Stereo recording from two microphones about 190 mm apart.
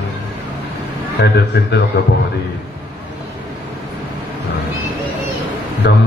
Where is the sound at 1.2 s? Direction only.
60° left (ahead or behind).